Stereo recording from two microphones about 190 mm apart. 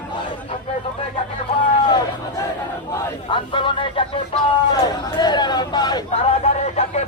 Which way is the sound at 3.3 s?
25° left (ahead or behind).